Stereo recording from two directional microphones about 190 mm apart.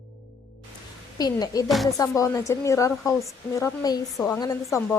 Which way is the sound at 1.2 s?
20° left (ahead or behind).